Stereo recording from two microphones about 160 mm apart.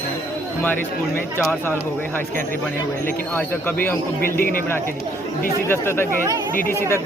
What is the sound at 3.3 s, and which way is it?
Speech, 10° left (ahead or behind).